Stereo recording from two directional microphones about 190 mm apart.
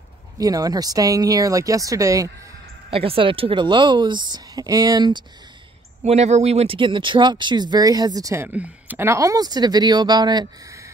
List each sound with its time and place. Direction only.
0.4 s speech: 20° right (ahead or behind)
2.9 s speech: 30° right (ahead or behind)
6.0 s speech: 35° right (ahead or behind)